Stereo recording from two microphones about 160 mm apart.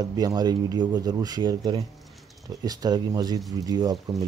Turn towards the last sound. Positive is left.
turn(degrees=-25)  # may be behind; listen again after turning